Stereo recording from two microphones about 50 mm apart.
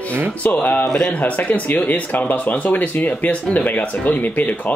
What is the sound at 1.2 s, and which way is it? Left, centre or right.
Speech, left.